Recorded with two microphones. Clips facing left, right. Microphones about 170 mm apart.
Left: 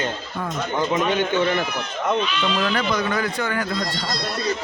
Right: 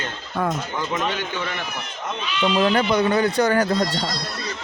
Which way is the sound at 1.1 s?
25° left (ahead or behind).